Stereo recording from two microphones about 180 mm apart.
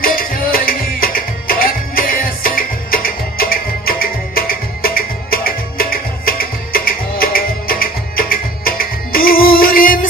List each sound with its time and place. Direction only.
0.0 s music: 55° left (ahead or behind)